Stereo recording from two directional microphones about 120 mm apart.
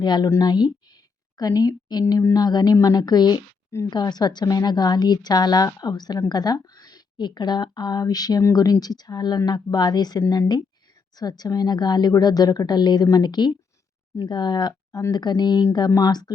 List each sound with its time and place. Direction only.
0.0 s a woman's voice: 40° left (ahead or behind)